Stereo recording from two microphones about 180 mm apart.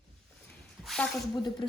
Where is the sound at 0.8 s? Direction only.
Centre (ahead or behind).